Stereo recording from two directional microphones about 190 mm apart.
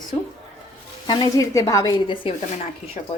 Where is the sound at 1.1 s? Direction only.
20° left (ahead or behind).